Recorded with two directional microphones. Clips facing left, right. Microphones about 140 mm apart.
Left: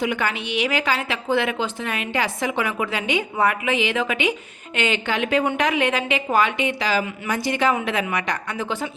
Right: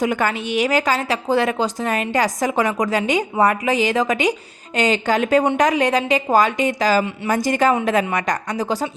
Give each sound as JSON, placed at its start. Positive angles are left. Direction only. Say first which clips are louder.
{"t": 0.0, "sound": "a woman's voice", "louder": "right 4 dB", "side_deg": -45}